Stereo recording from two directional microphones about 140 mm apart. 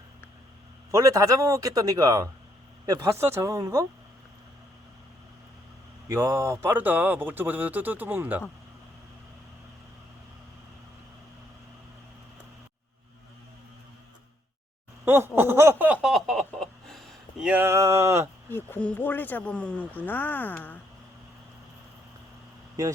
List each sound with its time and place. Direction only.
0.9 s speech: 25° right (ahead or behind)
6.1 s speech: 25° right (ahead or behind)
15.0 s a sound: 15° right (ahead or behind); by 17.5 s centre (ahead or behind)
17.5 s speech: 15° right (ahead or behind)
18.5 s speech: 10° left (ahead or behind)